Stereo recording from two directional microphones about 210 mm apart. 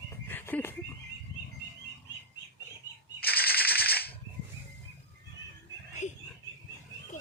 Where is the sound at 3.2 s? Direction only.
45° left (ahead or behind).